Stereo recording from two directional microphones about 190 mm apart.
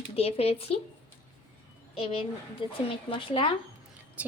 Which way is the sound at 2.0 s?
30° left (ahead or behind).